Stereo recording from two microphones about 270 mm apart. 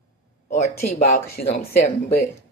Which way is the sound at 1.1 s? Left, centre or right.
Left.